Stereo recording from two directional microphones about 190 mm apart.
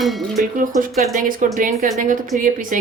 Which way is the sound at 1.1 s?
40° right (ahead or behind).